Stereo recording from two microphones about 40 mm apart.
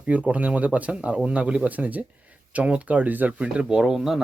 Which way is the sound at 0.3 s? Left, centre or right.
Right.